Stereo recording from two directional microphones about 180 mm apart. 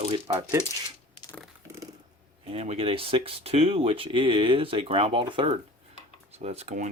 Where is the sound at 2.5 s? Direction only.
35° right (ahead or behind).